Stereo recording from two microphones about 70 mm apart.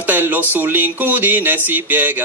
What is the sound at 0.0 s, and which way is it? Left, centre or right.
Music, right.